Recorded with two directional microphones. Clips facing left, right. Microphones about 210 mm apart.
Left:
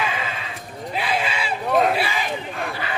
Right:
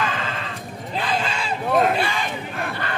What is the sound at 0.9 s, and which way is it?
Crowd, 10° left (ahead or behind).